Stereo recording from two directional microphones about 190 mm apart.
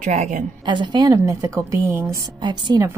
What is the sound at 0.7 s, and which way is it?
A woman's voice, 25° right (ahead or behind).